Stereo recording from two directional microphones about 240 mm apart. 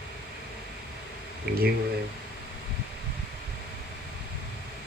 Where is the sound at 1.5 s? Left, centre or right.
Right.